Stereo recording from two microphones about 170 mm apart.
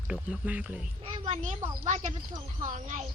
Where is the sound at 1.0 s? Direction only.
40° right (ahead or behind).